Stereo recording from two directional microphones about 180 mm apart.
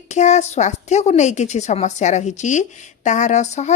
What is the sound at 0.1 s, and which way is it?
A woman's voice, 40° left (ahead or behind).